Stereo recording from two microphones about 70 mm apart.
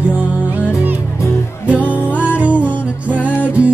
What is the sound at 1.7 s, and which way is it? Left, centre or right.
Music, left.